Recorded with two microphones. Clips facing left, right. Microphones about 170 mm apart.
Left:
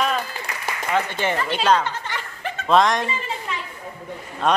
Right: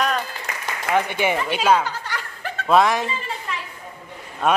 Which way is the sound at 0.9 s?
15° right (ahead or behind).